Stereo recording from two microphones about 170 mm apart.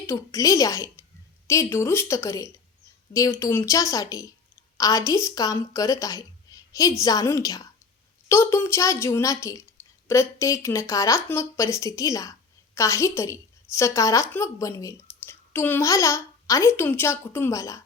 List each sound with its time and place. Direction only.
0.1 s a woman's voice: 20° left (ahead or behind)